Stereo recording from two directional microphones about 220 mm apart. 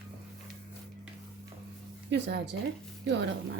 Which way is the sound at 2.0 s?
50° right (ahead or behind).